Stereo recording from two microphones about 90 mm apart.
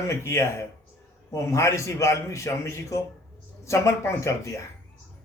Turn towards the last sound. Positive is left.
turn(degrees=35)  # may be behind; listen again after turning